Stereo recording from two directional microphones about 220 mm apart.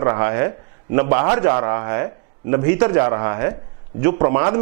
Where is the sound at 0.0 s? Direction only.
20° right (ahead or behind).